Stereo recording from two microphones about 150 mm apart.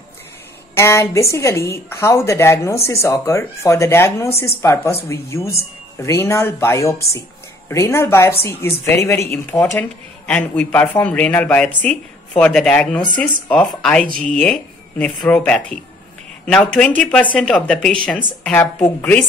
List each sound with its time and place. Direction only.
0.7 s speech: 20° left (ahead or behind)